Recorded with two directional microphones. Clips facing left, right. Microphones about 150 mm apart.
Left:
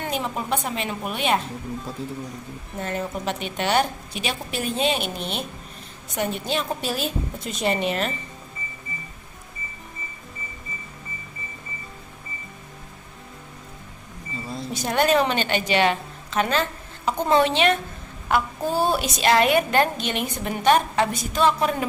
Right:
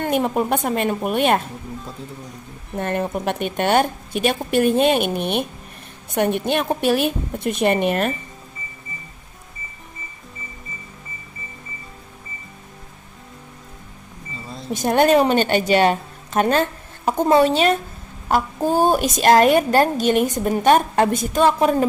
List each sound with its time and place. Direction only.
0.0 s a woman's voice: 50° right (ahead or behind)
2.0 s speech: 5° left (ahead or behind)
2.7 s a woman's voice: 55° right (ahead or behind)
14.7 s a woman's voice: 50° right (ahead or behind)